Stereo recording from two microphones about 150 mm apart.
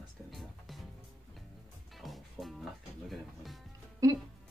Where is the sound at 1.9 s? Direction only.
Centre (ahead or behind).